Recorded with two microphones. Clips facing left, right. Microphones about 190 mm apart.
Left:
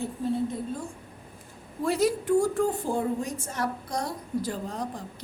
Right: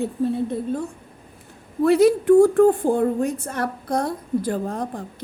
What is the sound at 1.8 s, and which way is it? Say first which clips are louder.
A woman's voice: right 10 dB; 60° right (ahead or behind).